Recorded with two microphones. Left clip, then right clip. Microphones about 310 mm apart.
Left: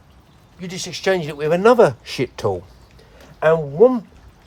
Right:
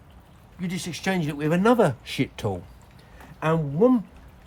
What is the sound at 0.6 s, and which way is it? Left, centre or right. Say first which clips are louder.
Speech: left 4 dB; centre.